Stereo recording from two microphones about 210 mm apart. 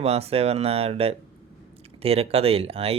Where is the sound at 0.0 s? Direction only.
30° right (ahead or behind).